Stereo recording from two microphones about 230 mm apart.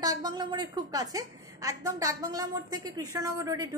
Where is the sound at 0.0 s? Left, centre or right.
Centre.